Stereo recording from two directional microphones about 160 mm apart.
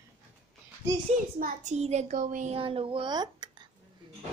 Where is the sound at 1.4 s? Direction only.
45° right (ahead or behind).